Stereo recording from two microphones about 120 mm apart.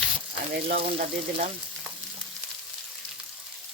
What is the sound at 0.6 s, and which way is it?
Speech, 55° right (ahead or behind).